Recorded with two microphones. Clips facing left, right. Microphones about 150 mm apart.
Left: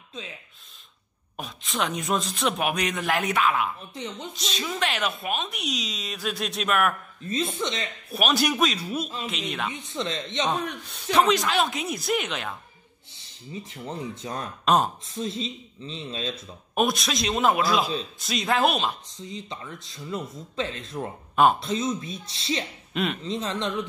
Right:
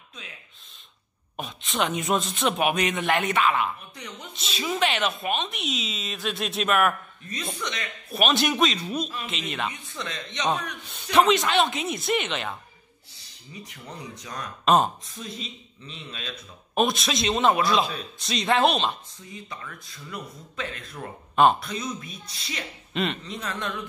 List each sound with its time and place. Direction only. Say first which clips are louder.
0.2 s speech: left 7 dB; 25° left (ahead or behind)
1.3 s speech: right 1 dB; centre (ahead or behind)
3.9 s speech: left 6 dB; 25° left (ahead or behind)
4.3 s speech: right 6 dB; 5° right (ahead or behind)
7.5 s speech: left 4 dB; 25° left (ahead or behind)
8.1 s speech: right 1 dB; centre (ahead or behind)
9.7 s speech: left 4 dB; 25° left (ahead or behind)
10.8 s speech: right 2 dB; centre (ahead or behind)
13.1 s speech: left 7 dB; 25° left (ahead or behind)
14.6 s speech: right 2 dB; centre (ahead or behind)
15.0 s speech: left 7 dB; 30° left (ahead or behind)
16.7 s speech: right 1 dB; centre (ahead or behind)
19.2 s speech: left 3 dB; 20° left (ahead or behind)